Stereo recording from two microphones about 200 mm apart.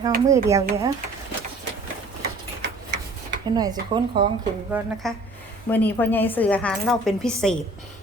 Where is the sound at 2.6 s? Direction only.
60° right (ahead or behind).